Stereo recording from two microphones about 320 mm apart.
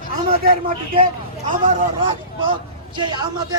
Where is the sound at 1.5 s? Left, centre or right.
Right.